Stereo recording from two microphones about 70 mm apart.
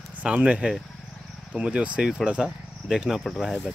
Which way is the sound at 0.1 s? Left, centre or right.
Centre.